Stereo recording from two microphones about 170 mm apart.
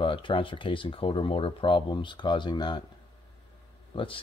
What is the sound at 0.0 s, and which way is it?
Speech, 30° left (ahead or behind).